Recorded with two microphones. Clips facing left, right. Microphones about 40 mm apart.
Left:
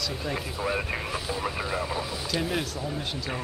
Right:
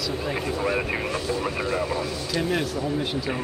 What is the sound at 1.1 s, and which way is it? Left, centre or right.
Speech, centre.